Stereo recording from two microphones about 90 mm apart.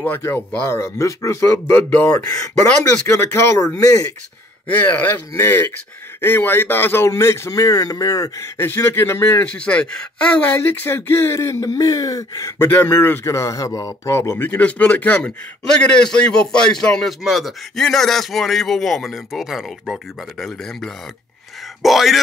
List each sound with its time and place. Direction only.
0.7 s a man's voice: 35° left (ahead or behind)
2.2 s a man's voice: 40° left (ahead or behind)
4.6 s a man's voice: 20° left (ahead or behind); by 8.5 s 40° left (ahead or behind)
8.5 s speech: 25° left (ahead or behind)
9.5 s speech: 15° left (ahead or behind); by 12.5 s 40° left (ahead or behind)
12.5 s a man's voice: 20° left (ahead or behind); by 22.2 s centre (ahead or behind)